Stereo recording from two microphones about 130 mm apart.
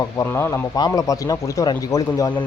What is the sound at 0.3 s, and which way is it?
Speech, 20° left (ahead or behind).